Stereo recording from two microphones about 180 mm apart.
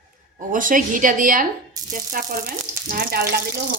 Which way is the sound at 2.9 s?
55° right (ahead or behind).